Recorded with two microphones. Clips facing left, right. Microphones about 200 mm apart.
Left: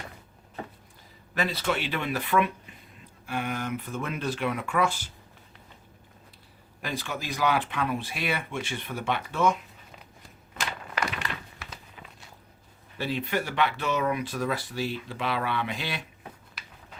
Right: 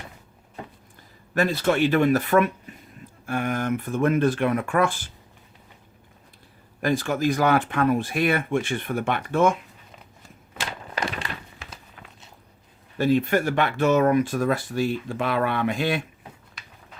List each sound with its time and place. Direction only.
1.4 s speech: 45° right (ahead or behind)
6.8 s speech: 45° right (ahead or behind)
10.9 s a sound: 30° right (ahead or behind)
13.0 s speech: 45° right (ahead or behind)